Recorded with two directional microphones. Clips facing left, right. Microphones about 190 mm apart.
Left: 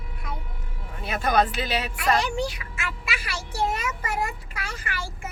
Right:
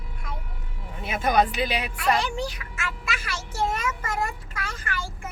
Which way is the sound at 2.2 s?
10° left (ahead or behind).